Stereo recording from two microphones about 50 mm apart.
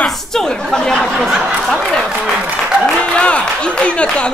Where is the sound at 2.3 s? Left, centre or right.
Right.